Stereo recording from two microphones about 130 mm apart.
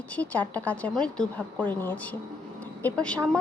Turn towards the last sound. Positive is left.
turn(degrees=10)  # may be behind; listen again after turning